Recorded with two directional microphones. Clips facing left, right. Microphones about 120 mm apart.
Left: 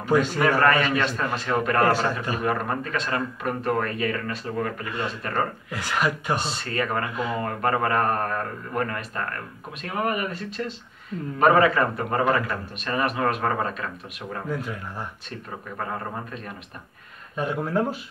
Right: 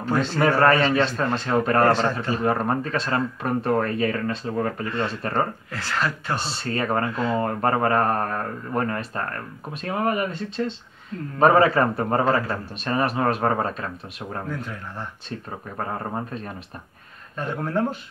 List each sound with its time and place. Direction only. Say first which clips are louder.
0.0 s speech: left 2 dB; 10° left (ahead or behind)
0.4 s a man's voice: right 2 dB; 30° right (ahead or behind)
5.7 s speech: left 1 dB; 15° left (ahead or behind)
6.5 s a man's voice: right 2 dB; 35° right (ahead or behind)
7.1 s speech: right 3 dB; 15° left (ahead or behind)
7.3 s a man's voice: right 1 dB; 30° right (ahead or behind)
17.4 s speech: even; 5° left (ahead or behind)